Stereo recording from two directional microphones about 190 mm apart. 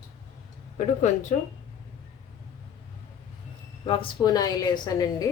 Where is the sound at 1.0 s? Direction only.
40° left (ahead or behind).